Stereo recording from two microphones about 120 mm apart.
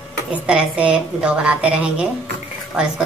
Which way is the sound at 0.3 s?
10° right (ahead or behind).